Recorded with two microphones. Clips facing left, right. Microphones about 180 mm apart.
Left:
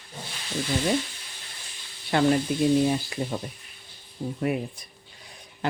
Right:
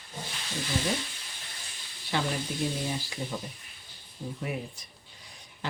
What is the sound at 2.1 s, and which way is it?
Speech, 55° left (ahead or behind).